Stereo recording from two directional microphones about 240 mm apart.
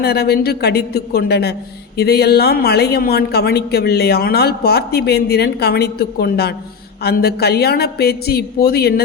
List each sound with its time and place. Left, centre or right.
0.0 s a woman's voice: left